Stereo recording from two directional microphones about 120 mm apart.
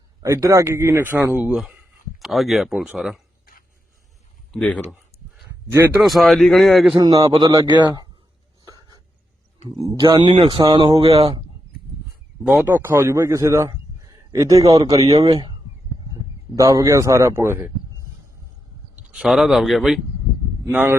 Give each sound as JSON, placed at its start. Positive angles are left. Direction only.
{"t": 0.2, "sound": "speech", "side_deg": -25}
{"t": 5.7, "sound": "speech", "side_deg": -15}
{"t": 6.0, "sound": "speech", "side_deg": 0}
{"t": 6.9, "sound": "speech", "side_deg": -35}
{"t": 8.6, "sound": "a sound", "side_deg": -30}
{"t": 9.6, "sound": "speech", "side_deg": -35}
{"t": 10.6, "sound": "speech", "side_deg": -35}
{"t": 11.0, "sound": "speech", "side_deg": -60}
{"t": 12.6, "sound": "a man's voice", "side_deg": -20}
{"t": 15.3, "sound": "speech", "side_deg": -45}
{"t": 16.6, "sound": "a man's voice", "side_deg": -30}
{"t": 18.9, "sound": "speech", "side_deg": -10}
{"t": 20.7, "sound": "speech", "side_deg": -15}